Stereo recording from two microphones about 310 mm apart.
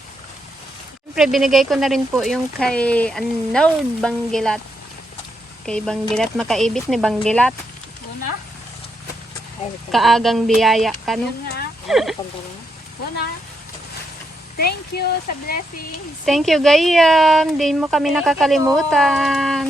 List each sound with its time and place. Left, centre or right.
1.1 s a woman's voice: centre
5.6 s a woman's voice: centre
9.9 s a woman's voice: centre
11.4 s a sound: left
11.9 s a woman's voice: centre
14.6 s speech: left
16.2 s a woman's voice: centre